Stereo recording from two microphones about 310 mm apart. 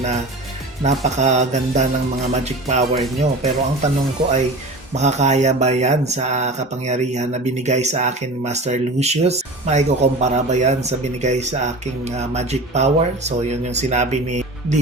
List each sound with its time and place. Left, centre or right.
0.9 s speech: right
4.9 s speech: right